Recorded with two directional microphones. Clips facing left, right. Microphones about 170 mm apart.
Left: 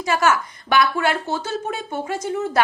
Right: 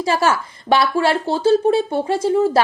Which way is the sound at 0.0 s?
30° right (ahead or behind).